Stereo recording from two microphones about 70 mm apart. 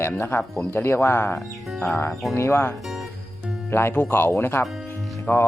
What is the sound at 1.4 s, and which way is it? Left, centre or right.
Speech, centre.